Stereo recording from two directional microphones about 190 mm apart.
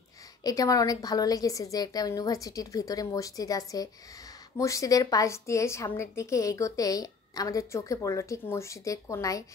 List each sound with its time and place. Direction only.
0.4 s a woman's voice: 20° left (ahead or behind)